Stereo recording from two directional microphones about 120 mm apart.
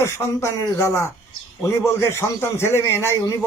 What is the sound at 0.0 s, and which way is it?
Speech, 20° left (ahead or behind).